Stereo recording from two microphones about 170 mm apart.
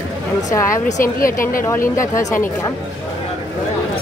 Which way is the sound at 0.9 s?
55° left (ahead or behind).